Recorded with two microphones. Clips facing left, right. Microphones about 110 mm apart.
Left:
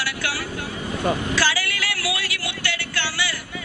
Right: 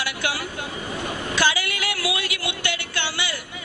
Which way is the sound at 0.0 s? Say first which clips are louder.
Even; 20° right (ahead or behind).